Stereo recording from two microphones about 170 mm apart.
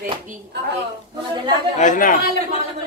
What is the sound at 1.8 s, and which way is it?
Speech, 50° left (ahead or behind).